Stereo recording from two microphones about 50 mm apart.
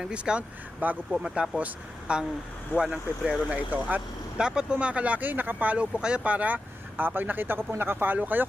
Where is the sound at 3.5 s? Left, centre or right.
Right.